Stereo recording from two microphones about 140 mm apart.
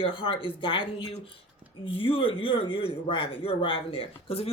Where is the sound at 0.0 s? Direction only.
40° left (ahead or behind).